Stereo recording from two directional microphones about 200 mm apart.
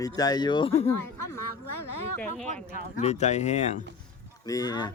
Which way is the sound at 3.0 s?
35° left (ahead or behind).